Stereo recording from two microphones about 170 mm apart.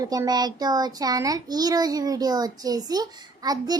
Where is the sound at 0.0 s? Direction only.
20° right (ahead or behind).